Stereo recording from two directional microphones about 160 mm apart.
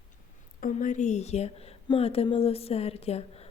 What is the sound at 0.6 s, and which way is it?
A woman's voice, 55° left (ahead or behind).